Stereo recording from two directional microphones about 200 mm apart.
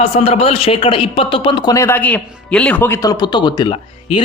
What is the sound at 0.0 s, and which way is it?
A man's voice, 30° left (ahead or behind).